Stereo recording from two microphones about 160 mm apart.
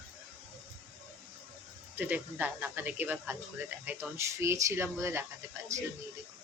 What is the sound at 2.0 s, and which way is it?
Speech, 10° right (ahead or behind).